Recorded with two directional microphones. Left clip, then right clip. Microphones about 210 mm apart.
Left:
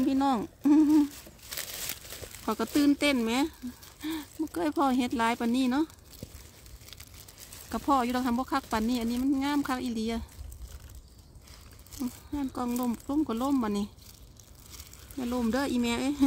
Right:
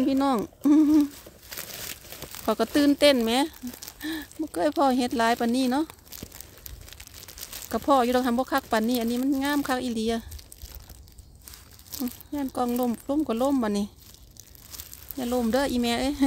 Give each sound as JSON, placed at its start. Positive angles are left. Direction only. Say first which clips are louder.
{"t": 0.0, "sound": "speech", "louder": "right 3 dB", "side_deg": -35}
{"t": 2.4, "sound": "speech", "louder": "right 4 dB", "side_deg": -40}
{"t": 7.7, "sound": "speech", "louder": "right 6 dB", "side_deg": -35}
{"t": 12.4, "sound": "speech", "louder": "right 6 dB", "side_deg": -40}
{"t": 15.1, "sound": "speech", "louder": "right 5 dB", "side_deg": -40}